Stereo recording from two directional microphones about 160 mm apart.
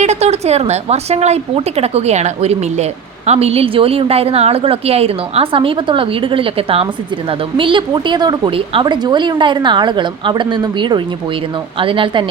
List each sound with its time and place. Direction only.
0.0 s a woman's voice: 45° right (ahead or behind)